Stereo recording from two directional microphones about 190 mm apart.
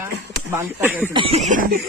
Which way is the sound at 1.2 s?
30° right (ahead or behind).